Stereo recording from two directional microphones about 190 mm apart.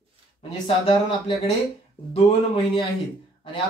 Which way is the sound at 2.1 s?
30° left (ahead or behind).